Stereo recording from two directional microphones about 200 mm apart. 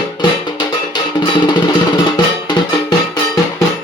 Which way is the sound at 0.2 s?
20° left (ahead or behind).